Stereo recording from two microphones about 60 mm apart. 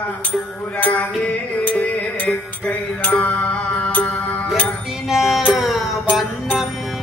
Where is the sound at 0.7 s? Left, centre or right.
Left.